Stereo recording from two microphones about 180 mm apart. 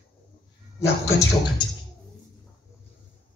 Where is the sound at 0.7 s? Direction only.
15° left (ahead or behind).